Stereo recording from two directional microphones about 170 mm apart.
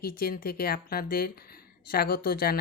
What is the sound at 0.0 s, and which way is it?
Speech, 60° left (ahead or behind).